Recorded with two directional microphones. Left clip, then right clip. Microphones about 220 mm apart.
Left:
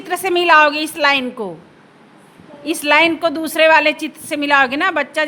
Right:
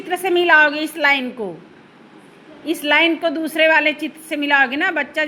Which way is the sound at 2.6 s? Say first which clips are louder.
Left 2 dB; 25° left (ahead or behind).